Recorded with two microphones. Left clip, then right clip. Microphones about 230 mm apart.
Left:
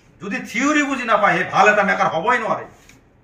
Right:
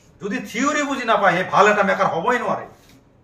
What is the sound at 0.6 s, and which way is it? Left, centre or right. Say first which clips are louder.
A man's voice: left 3 dB; centre.